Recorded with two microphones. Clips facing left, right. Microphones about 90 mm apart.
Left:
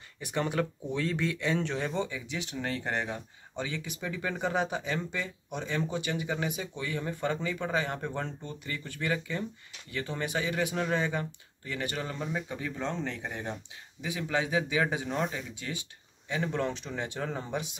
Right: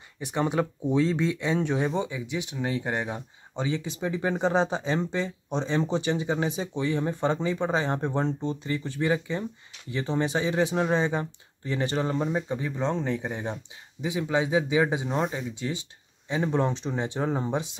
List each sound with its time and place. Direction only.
0.2 s speech: 20° right (ahead or behind)